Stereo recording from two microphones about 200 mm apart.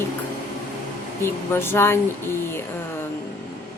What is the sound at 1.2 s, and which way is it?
Speech, 10° left (ahead or behind).